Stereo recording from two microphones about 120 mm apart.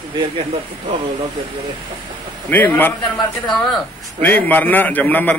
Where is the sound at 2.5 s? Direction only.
15° left (ahead or behind).